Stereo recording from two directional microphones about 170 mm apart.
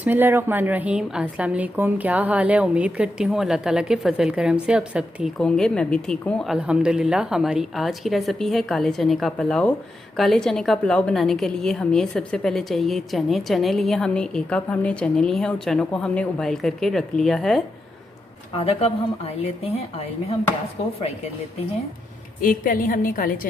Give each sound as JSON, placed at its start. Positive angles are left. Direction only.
{"t": 0.0, "sound": "a woman's voice", "side_deg": -10}
{"t": 18.5, "sound": "speech", "side_deg": 35}
{"t": 22.4, "sound": "a woman's voice", "side_deg": 55}